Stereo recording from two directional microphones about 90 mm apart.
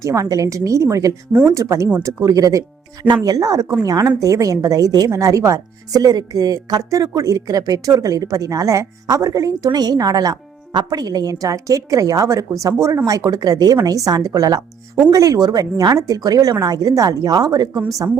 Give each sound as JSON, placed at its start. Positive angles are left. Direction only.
{"t": 0.0, "sound": "a woman's voice", "side_deg": -40}
{"t": 17.8, "sound": "a woman's voice", "side_deg": -40}